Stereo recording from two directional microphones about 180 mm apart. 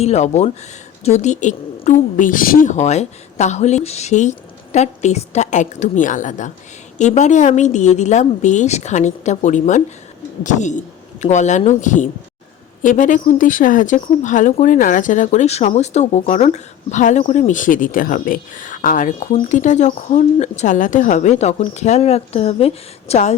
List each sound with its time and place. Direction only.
0.0 s a woman's voice: 40° left (ahead or behind)